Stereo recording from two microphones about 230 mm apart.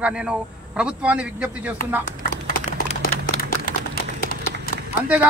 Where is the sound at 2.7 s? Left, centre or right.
Left.